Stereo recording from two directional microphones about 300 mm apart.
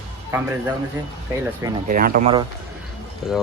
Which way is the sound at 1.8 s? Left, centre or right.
Right.